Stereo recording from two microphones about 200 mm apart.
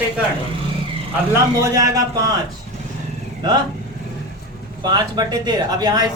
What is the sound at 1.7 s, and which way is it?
Speech, 15° right (ahead or behind).